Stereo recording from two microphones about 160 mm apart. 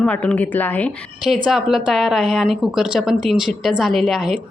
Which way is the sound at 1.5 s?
5° right (ahead or behind).